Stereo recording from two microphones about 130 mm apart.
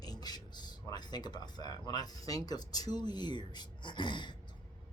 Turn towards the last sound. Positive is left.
turn(degrees=35)  # may be behind; listen again after turning